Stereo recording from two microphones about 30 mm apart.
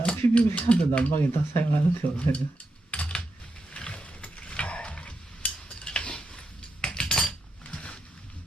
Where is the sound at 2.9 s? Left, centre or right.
Left.